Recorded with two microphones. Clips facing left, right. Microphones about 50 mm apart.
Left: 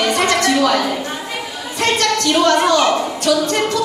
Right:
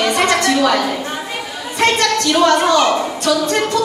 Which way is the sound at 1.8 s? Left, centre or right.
Right.